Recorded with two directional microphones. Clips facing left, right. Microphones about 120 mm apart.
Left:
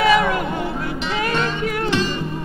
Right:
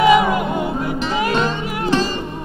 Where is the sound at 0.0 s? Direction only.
20° right (ahead or behind).